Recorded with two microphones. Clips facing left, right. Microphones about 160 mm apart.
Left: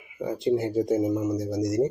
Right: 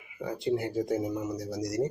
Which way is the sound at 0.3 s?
20° left (ahead or behind).